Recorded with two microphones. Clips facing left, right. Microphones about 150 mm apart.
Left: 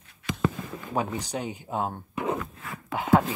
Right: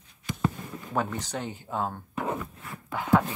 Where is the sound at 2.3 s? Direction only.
90° left.